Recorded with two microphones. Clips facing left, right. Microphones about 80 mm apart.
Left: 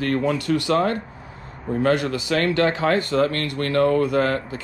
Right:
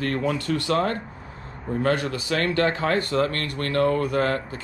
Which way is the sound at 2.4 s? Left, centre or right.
Right.